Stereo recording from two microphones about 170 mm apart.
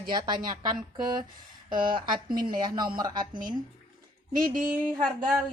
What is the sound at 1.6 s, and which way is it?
Speech, 30° right (ahead or behind).